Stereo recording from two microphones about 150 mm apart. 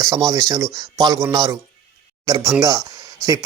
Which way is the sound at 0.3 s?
20° right (ahead or behind).